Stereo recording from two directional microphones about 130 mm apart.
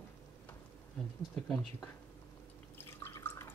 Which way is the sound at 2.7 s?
15° left (ahead or behind).